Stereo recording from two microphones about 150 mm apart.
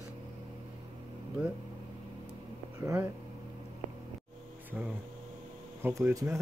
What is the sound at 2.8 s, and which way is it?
Speech, 20° right (ahead or behind).